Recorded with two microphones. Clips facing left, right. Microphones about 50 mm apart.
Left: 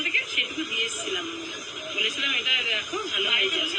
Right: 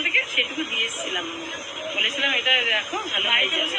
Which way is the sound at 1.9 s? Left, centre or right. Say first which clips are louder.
Right 3 dB; right.